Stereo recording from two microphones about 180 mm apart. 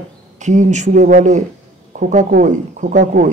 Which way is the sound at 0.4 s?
40° right (ahead or behind).